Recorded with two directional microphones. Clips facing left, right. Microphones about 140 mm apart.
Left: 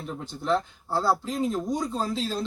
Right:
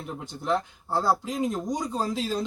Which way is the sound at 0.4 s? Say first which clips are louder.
Left 1 dB; 15° right (ahead or behind).